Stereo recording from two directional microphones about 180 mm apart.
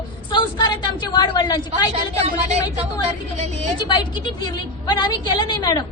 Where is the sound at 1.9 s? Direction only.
35° right (ahead or behind).